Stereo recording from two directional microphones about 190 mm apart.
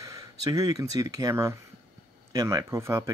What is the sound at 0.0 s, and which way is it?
Speech, 20° right (ahead or behind).